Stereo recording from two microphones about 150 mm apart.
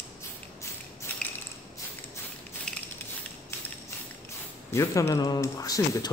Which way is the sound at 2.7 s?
5° left (ahead or behind).